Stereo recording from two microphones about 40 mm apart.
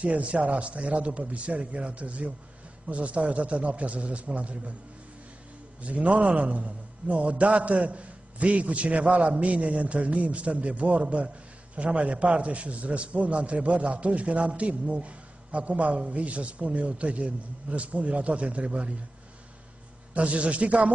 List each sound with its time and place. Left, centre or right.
0.0 s a man's voice: right
5.8 s a man's voice: right
20.2 s a man's voice: right